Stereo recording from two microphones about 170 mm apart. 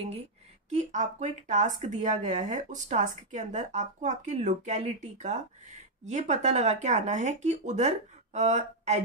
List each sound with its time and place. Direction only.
0.7 s speech: 45° right (ahead or behind)